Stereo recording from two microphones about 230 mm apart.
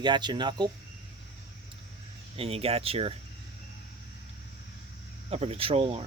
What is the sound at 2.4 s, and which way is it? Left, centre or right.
Speech, right.